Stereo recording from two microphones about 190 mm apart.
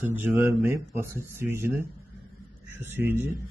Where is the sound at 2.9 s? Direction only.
10° right (ahead or behind).